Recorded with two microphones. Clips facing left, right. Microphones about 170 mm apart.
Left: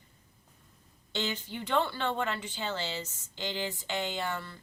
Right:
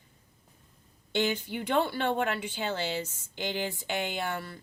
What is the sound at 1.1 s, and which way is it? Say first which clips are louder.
Speech: right 6 dB; 55° right (ahead or behind).